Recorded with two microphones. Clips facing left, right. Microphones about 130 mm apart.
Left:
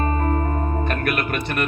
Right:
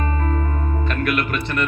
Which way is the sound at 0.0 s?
40° left (ahead or behind).